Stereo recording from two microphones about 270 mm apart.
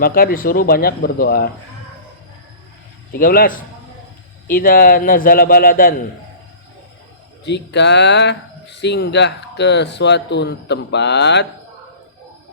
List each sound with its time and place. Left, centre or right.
0.0 s speech: left
3.1 s speech: left
7.4 s speech: left